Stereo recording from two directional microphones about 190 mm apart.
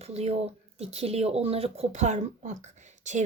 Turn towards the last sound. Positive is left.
turn(degrees=-40)  # may be behind; listen again after turning